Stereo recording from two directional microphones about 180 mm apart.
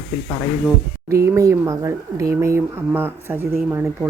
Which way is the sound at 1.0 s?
15° right (ahead or behind).